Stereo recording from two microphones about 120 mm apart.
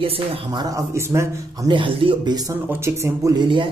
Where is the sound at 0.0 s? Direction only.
50° right (ahead or behind).